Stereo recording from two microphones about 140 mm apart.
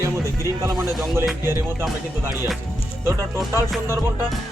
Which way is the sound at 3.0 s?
20° right (ahead or behind).